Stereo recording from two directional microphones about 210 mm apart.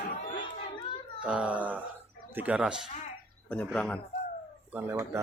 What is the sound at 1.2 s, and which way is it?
A child's voice, 5° right (ahead or behind).